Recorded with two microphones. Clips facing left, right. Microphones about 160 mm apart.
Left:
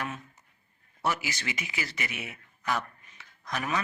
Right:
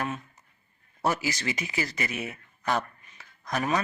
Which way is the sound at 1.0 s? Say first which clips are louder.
Right 4 dB; 40° right (ahead or behind).